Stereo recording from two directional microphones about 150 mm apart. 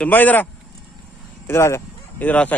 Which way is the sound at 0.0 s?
10° left (ahead or behind).